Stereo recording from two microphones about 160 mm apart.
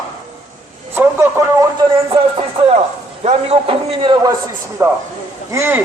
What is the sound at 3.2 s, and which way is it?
A man's voice, 40° right (ahead or behind).